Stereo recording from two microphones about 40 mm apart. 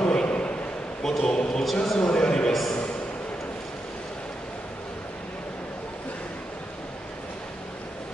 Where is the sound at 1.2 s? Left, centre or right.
Left.